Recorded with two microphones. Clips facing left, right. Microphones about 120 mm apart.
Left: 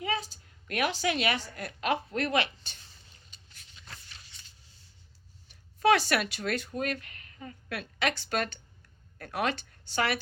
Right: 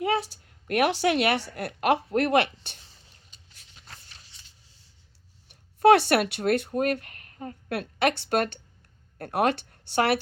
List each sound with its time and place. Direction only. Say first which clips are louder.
0.0 s a woman's voice: right 7 dB; 65° right (ahead or behind)
5.5 s speech: right 7 dB; 60° right (ahead or behind)